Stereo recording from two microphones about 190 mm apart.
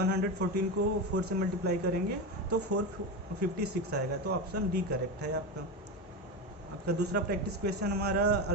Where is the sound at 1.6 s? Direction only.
60° right (ahead or behind).